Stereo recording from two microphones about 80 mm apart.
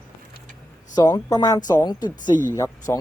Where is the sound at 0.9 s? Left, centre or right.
Left.